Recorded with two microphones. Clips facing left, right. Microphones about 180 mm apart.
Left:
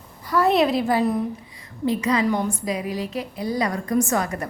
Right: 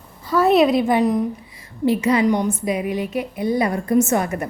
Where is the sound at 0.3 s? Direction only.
25° right (ahead or behind).